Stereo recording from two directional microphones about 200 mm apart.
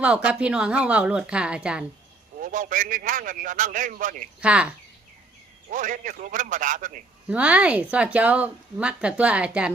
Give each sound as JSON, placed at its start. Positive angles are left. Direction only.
{"t": 0.0, "sound": "a woman's voice", "side_deg": -5}
{"t": 2.4, "sound": "a man's voice", "side_deg": -40}
{"t": 4.4, "sound": "a woman's voice", "side_deg": -5}
{"t": 5.7, "sound": "a man's voice", "side_deg": -40}
{"t": 7.3, "sound": "speech", "side_deg": -5}